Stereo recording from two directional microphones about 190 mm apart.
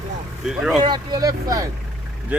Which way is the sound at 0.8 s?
20° right (ahead or behind).